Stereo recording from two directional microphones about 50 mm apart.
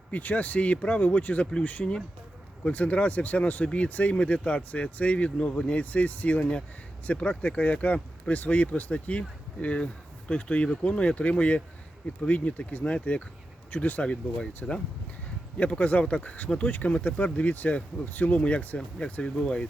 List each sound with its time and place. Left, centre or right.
0.1 s speech: left
2.6 s speech: left
13.7 s speech: left
14.0 s speech: left